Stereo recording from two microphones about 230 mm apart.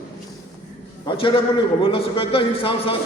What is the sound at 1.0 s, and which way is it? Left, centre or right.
A man's voice, left.